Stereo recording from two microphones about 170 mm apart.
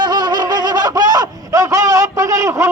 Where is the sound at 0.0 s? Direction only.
25° right (ahead or behind).